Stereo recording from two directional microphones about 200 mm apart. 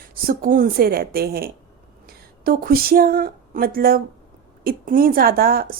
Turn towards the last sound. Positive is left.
turn(degrees=-45)  # may be behind; listen again after turning